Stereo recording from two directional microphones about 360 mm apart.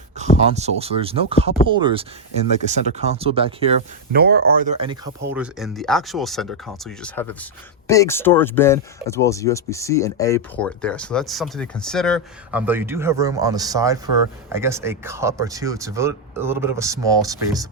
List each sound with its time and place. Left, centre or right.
0.2 s speech: centre
4.8 s speech: centre
5.3 s speech: centre